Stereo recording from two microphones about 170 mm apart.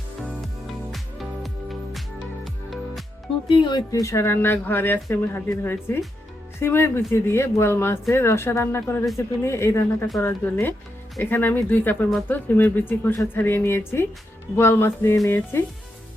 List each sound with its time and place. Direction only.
0.2 s music: centre (ahead or behind)
3.5 s speech: 25° left (ahead or behind)